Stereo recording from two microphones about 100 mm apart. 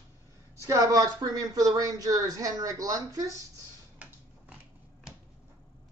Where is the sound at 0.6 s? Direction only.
35° right (ahead or behind).